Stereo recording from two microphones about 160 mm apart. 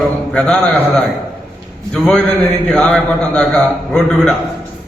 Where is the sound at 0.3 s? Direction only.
5° left (ahead or behind).